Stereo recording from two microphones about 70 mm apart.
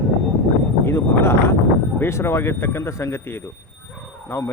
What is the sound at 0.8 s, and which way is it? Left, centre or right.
Speech, left.